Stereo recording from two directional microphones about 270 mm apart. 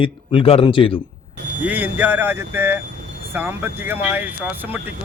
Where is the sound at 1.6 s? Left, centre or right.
Centre.